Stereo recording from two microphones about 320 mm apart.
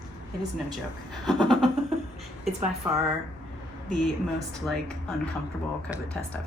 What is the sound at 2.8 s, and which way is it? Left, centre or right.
Speech, centre.